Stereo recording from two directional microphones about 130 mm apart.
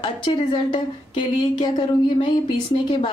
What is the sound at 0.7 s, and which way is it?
Speech, 40° left (ahead or behind).